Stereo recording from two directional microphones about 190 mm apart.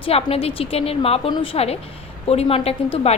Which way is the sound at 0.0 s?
30° left (ahead or behind).